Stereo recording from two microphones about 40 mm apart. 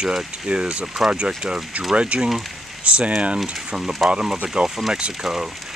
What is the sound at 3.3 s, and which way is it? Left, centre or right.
Speech, centre.